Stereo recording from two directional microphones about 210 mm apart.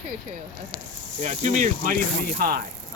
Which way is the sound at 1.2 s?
35° right (ahead or behind).